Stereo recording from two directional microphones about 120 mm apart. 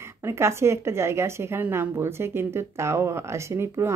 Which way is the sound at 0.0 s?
20° right (ahead or behind).